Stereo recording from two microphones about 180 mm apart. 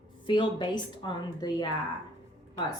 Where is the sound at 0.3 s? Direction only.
25° left (ahead or behind).